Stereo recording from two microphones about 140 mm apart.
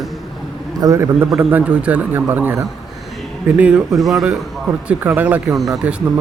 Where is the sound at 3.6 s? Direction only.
10° right (ahead or behind).